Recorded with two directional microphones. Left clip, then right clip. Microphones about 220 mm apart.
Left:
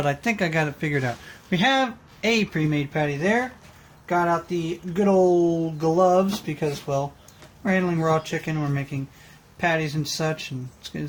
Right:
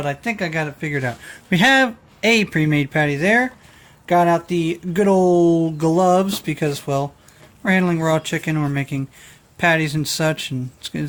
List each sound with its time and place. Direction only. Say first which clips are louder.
0.0 s speech: right 1 dB; centre (ahead or behind)
1.5 s speech: right 6 dB; 35° right (ahead or behind)